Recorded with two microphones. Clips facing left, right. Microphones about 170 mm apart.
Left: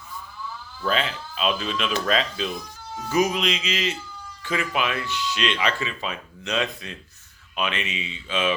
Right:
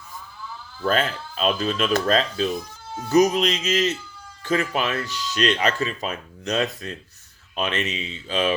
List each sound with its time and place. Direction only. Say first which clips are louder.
0.9 s speech: right 3 dB; 45° right (ahead or behind)